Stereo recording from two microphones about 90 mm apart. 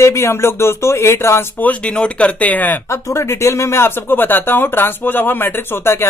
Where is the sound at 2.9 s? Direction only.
35° left (ahead or behind).